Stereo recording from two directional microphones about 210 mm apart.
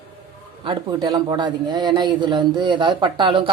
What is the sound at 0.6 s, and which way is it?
Speech, 20° right (ahead or behind).